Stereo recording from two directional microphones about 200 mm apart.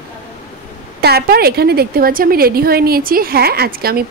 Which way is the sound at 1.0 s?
50° right (ahead or behind).